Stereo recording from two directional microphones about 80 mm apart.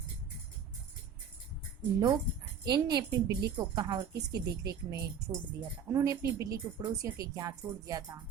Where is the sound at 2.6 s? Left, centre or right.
Right.